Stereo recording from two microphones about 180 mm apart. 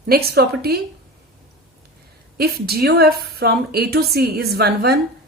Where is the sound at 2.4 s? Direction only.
60° right (ahead or behind).